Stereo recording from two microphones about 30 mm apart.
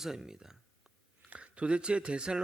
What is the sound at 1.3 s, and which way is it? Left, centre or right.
Speech, right.